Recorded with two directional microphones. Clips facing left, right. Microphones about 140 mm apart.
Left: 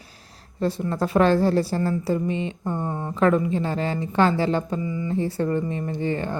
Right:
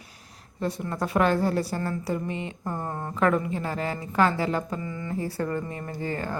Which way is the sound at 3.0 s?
20° left (ahead or behind).